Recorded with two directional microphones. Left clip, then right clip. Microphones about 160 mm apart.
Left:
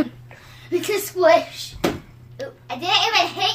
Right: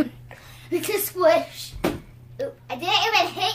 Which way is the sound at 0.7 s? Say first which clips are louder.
Left 3 dB; 25° right (ahead or behind).